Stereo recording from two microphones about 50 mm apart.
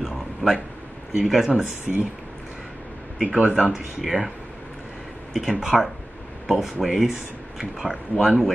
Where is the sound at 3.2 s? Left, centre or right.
Right.